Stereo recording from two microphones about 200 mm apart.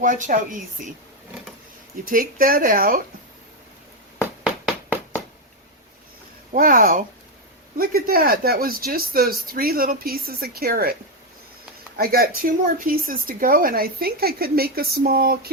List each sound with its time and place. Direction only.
0.0 s a woman's voice: 40° right (ahead or behind)
2.0 s speech: 45° right (ahead or behind)
6.5 s speech: 45° right (ahead or behind)
11.9 s speech: 50° right (ahead or behind)